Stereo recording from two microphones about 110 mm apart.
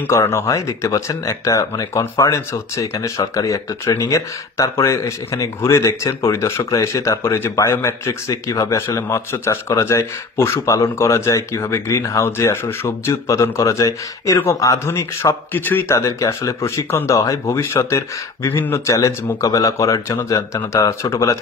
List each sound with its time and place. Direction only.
0.0 s speech: 25° left (ahead or behind)